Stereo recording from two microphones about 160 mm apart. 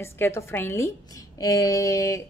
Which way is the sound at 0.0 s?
15° left (ahead or behind).